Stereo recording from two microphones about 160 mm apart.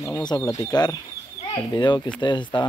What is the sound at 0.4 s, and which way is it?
Speech, 20° left (ahead or behind).